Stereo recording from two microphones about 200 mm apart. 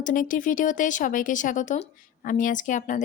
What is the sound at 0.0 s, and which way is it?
Speech, 40° left (ahead or behind).